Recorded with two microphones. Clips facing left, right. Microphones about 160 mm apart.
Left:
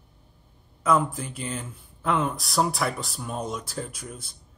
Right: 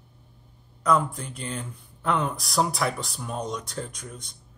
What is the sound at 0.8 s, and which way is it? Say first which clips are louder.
Speech: even; 5° left (ahead or behind).